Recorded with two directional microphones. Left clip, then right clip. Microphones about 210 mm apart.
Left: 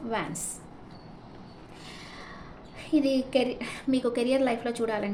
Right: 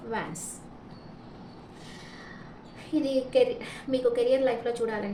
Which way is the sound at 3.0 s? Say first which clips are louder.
Right 1 dB; 50° left (ahead or behind).